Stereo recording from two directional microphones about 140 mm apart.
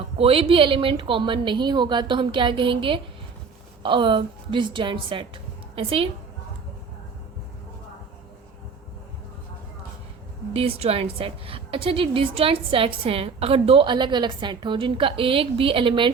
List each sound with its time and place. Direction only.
0.2 s a woman's voice: 45° right (ahead or behind)
10.5 s a woman's voice: 45° right (ahead or behind)